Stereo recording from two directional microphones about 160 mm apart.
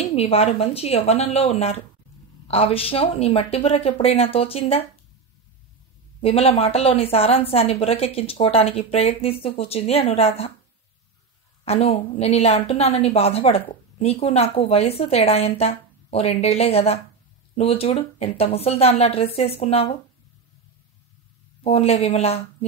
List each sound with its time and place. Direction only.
0.1 s a woman's voice: 40° left (ahead or behind)
6.2 s a woman's voice: 40° left (ahead or behind)
11.6 s a woman's voice: 40° left (ahead or behind)
21.6 s a woman's voice: 40° left (ahead or behind)